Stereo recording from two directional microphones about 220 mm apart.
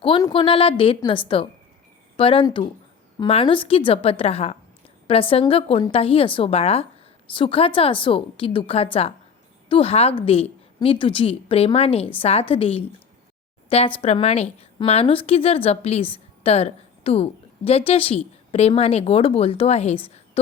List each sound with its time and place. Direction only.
0.0 s a woman's voice: 20° left (ahead or behind)